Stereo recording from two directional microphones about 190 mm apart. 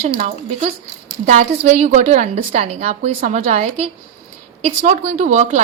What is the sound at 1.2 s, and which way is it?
A woman's voice, 40° right (ahead or behind).